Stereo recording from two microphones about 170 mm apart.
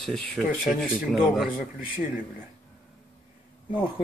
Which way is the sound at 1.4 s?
55° left (ahead or behind).